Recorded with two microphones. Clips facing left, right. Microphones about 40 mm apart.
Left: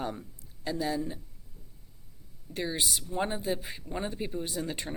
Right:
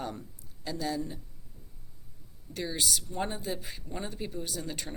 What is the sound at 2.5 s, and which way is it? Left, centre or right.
Speech, centre.